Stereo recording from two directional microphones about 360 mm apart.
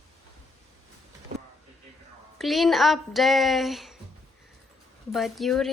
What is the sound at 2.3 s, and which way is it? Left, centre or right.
Speech, centre.